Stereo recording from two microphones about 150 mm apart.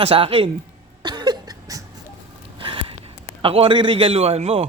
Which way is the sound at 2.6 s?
35° right (ahead or behind).